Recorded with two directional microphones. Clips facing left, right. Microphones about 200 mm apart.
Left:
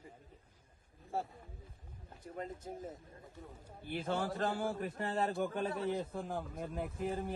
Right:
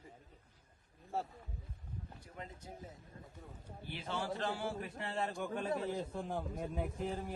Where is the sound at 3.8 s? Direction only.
50° left (ahead or behind).